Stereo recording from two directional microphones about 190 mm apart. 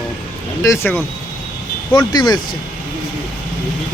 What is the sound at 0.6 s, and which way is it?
Speech, 15° left (ahead or behind).